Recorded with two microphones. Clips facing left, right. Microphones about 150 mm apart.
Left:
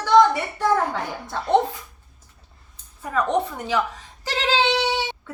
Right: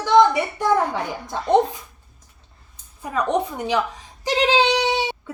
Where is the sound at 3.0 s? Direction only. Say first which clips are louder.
Even; 15° right (ahead or behind).